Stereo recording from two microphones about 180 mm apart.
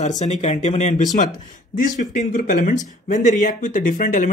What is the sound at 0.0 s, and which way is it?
Speech, 40° left (ahead or behind).